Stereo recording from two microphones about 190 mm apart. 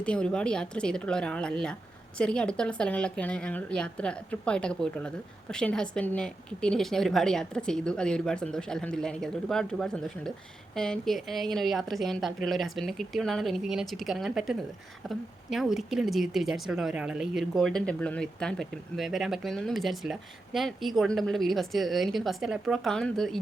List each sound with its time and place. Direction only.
0.0 s speech: 5° left (ahead or behind)